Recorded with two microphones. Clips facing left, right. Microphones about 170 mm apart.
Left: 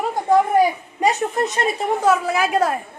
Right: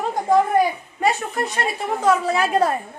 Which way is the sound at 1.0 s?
15° left (ahead or behind).